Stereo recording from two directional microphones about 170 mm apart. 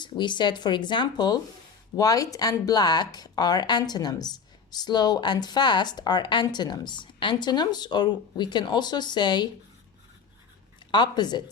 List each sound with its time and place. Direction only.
0.0 s speech: 25° left (ahead or behind)
10.9 s speech: 25° left (ahead or behind)